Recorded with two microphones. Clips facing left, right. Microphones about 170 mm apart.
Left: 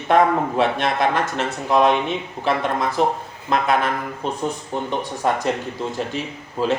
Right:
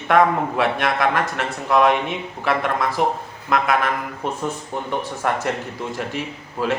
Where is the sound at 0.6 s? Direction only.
25° left (ahead or behind).